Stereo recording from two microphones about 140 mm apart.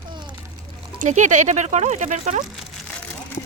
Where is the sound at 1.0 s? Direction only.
60° right (ahead or behind).